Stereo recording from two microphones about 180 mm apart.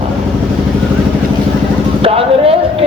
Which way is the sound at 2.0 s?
30° right (ahead or behind).